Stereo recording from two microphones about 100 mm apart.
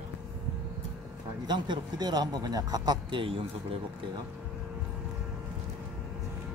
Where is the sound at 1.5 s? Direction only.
45° right (ahead or behind).